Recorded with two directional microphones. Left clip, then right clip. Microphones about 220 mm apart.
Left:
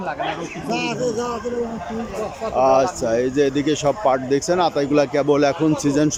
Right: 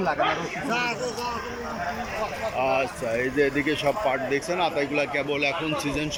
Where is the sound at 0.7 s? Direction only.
50° left (ahead or behind).